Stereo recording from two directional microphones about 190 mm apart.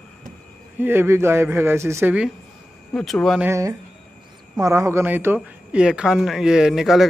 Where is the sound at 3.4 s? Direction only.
15° right (ahead or behind).